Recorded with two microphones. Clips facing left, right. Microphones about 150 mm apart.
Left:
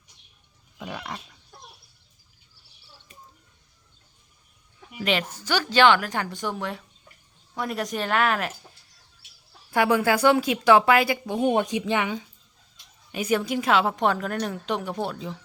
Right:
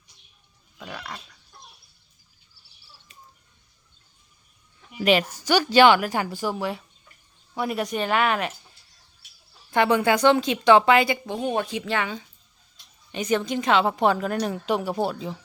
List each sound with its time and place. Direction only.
0.8 s dog: 20° left (ahead or behind)
4.9 s a woman's voice: 10° right (ahead or behind)
9.6 s a woman's voice: 5° left (ahead or behind)
11.3 s a woman's voice: 15° left (ahead or behind); by 15.4 s 5° right (ahead or behind)